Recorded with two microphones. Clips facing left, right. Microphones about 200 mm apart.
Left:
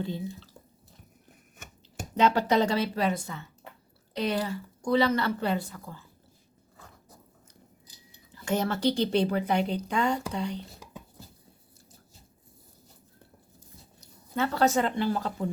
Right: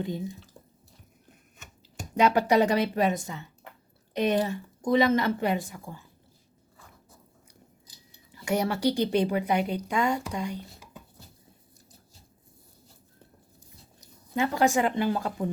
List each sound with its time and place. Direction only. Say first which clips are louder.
0.0 s speech: right 1 dB; 15° right (ahead or behind)
2.1 s speech: right 2 dB; 15° right (ahead or behind)
8.3 s a woman's voice: right 1 dB; 10° right (ahead or behind)
14.0 s speech: right 2 dB; 15° right (ahead or behind)